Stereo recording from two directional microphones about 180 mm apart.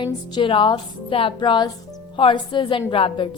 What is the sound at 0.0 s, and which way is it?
A woman's voice, 30° left (ahead or behind).